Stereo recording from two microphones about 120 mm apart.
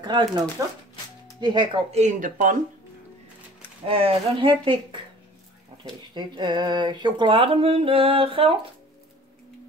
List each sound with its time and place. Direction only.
0.0 s speech: 35° right (ahead or behind)
0.6 s speech: 25° right (ahead or behind)
1.4 s speech: 40° right (ahead or behind)
1.9 s speech: 80° right
3.8 s speech: 50° right (ahead or behind)
6.1 s speech: 40° right (ahead or behind)